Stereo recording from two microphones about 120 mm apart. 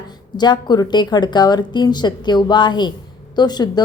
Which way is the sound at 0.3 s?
35° left (ahead or behind).